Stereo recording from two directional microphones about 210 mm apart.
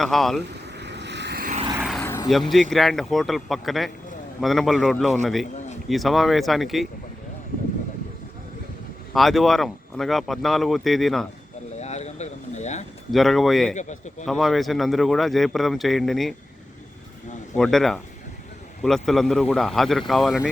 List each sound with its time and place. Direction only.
0.0 s speech: centre (ahead or behind)
0.8 s vehicle: 55° right (ahead or behind)
1.8 s vehicle: centre (ahead or behind)
2.0 s a sound: 10° left (ahead or behind)
2.5 s speech: centre (ahead or behind)
9.1 s speech: centre (ahead or behind)
11.8 s a sound: 30° left (ahead or behind)
13.1 s speech: centre (ahead or behind)
13.7 s speech: 35° left (ahead or behind)
14.3 s speech: centre (ahead or behind)
17.5 s speech: centre (ahead or behind)